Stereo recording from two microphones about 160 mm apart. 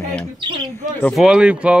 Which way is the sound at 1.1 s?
5° right (ahead or behind).